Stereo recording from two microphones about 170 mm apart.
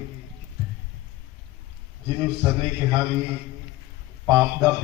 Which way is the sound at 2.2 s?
10° right (ahead or behind).